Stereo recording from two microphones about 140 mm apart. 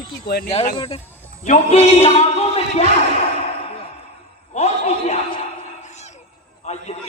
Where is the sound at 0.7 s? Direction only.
40° left (ahead or behind).